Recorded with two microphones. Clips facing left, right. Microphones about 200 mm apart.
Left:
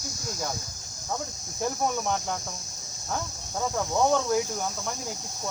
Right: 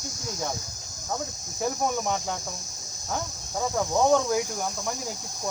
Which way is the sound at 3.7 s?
5° right (ahead or behind).